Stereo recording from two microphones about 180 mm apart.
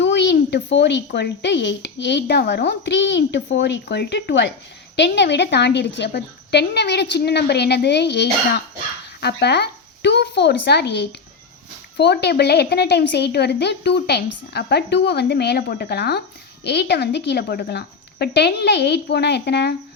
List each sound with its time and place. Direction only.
0.0 s a woman's voice: 75° left (ahead or behind)